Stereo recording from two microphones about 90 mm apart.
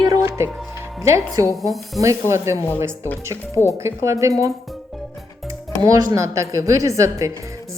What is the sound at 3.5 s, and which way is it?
Speech, 35° left (ahead or behind).